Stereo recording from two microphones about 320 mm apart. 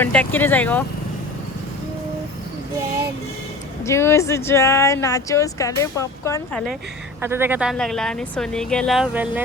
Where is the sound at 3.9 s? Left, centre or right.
Centre.